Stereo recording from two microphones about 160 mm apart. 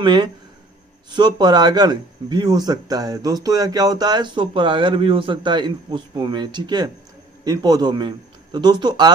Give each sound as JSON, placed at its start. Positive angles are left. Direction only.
{"t": 0.0, "sound": "speech", "side_deg": -30}